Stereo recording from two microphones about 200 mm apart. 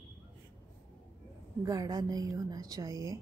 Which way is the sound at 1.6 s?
20° right (ahead or behind).